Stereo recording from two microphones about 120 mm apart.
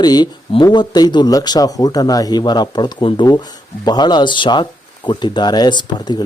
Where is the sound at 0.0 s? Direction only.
35° left (ahead or behind).